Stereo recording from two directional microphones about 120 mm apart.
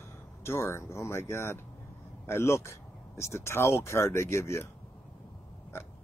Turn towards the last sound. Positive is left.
turn(degrees=20)  # may be behind; listen again after turning